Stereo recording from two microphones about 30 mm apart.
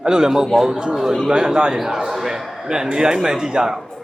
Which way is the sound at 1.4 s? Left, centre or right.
Right.